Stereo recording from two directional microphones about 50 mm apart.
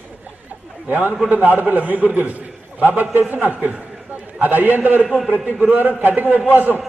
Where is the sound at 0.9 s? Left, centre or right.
Right.